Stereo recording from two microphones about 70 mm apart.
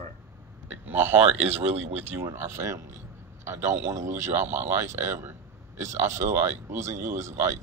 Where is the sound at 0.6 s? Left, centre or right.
Right.